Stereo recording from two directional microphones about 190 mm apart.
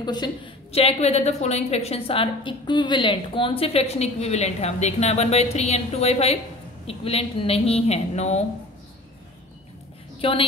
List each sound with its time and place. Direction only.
0.0 s a woman's voice: 25° left (ahead or behind)
10.2 s a woman's voice: 30° left (ahead or behind)